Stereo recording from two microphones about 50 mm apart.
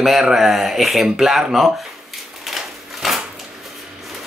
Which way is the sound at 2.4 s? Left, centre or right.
Centre.